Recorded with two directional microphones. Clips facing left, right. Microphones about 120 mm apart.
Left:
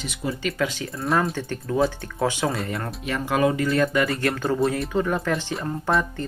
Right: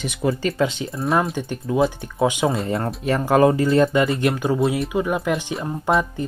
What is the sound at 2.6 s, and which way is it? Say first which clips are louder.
Speech: right 7 dB; 30° right (ahead or behind).